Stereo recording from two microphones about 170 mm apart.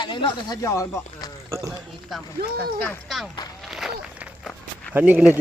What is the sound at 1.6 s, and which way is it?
Speech, centre (ahead or behind).